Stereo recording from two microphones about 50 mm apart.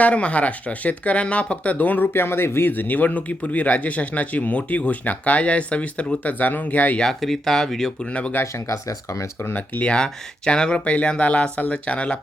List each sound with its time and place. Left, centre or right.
0.0 s speech: left
2.1 s speech: left
7.0 s speech: centre
7.9 s speech: left
8.5 s speech: left
9.4 s speech: left
9.8 s speech: centre